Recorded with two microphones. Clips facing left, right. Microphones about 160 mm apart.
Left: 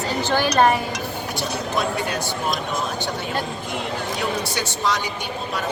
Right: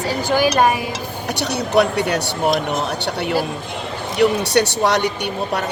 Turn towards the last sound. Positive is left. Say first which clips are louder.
# right 7 dB
turn(degrees=-70)  # may be behind; listen again after turning